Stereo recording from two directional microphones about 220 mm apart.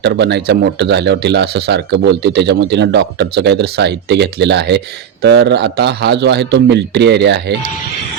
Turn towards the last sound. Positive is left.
turn(degrees=-50)  # may be behind; listen again after turning